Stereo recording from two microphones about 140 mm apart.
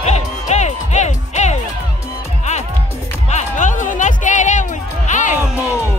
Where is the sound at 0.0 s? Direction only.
55° left (ahead or behind).